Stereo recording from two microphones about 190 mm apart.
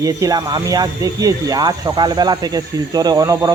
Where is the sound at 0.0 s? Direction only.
20° right (ahead or behind).